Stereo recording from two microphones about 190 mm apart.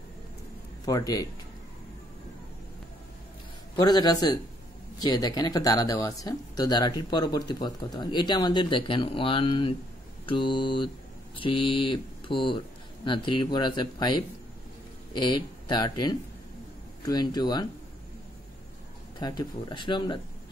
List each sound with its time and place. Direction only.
0.8 s speech: 20° left (ahead or behind)
3.7 s speech: 20° left (ahead or behind)
19.1 s speech: 20° left (ahead or behind)